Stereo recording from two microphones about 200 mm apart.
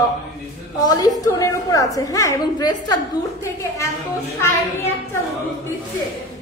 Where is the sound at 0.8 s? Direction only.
20° left (ahead or behind).